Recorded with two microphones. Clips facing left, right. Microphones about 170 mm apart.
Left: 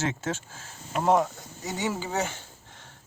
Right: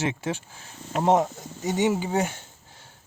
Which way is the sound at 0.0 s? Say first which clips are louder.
Right 2 dB; 15° right (ahead or behind).